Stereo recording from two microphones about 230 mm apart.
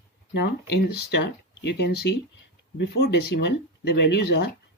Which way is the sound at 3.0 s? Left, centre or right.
Left.